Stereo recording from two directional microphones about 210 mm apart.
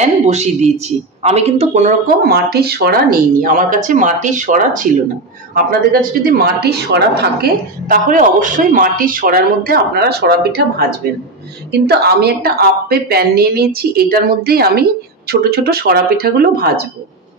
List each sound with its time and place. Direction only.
0.0 s a woman's voice: 30° right (ahead or behind)